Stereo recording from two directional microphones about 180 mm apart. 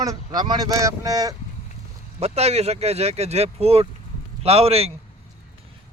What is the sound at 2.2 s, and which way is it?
Speech, 35° right (ahead or behind).